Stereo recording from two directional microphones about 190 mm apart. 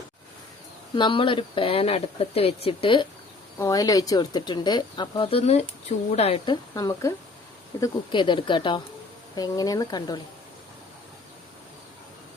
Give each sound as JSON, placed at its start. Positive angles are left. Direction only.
{"t": 0.9, "sound": "speech", "side_deg": 25}